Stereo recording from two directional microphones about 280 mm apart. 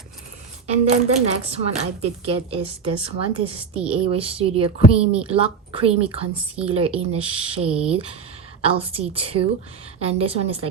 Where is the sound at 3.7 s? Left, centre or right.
Centre.